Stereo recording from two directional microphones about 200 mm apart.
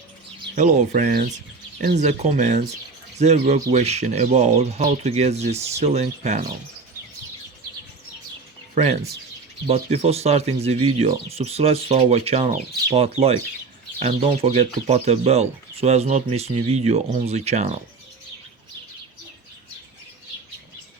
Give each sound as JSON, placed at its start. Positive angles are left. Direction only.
{"t": 0.5, "sound": "speech", "side_deg": -40}
{"t": 8.7, "sound": "speech", "side_deg": -35}